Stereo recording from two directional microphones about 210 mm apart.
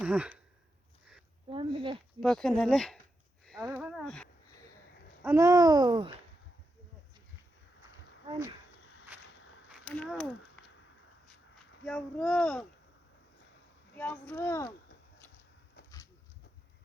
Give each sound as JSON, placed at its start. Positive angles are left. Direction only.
{"t": 0.0, "sound": "speech", "side_deg": -5}
{"t": 1.5, "sound": "speech", "side_deg": -25}
{"t": 2.2, "sound": "speech", "side_deg": 0}
{"t": 5.2, "sound": "babbling", "side_deg": -15}
{"t": 9.9, "sound": "speech", "side_deg": 5}
{"t": 11.3, "sound": "a sound", "side_deg": 5}
{"t": 13.9, "sound": "speech", "side_deg": 10}